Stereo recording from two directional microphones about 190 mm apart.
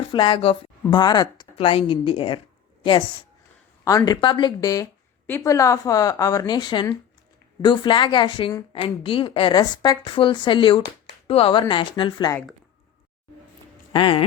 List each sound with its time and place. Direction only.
0.1 s a woman's voice: 25° left (ahead or behind)
3.8 s a woman's voice: 20° left (ahead or behind)
13.9 s a woman's voice: 30° left (ahead or behind)